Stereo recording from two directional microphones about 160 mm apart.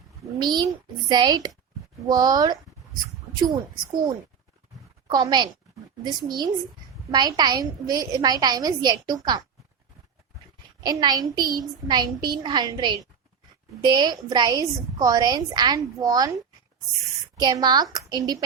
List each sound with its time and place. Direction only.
0.3 s a woman's voice: 25° right (ahead or behind)
5.0 s a woman's voice: 25° right (ahead or behind)
10.8 s a woman's voice: 25° right (ahead or behind)
17.4 s a woman's voice: 25° right (ahead or behind)